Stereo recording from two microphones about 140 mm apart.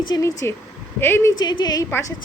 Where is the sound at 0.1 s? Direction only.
25° left (ahead or behind).